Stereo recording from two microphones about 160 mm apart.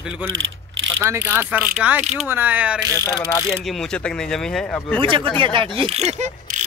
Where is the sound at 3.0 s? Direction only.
15° left (ahead or behind).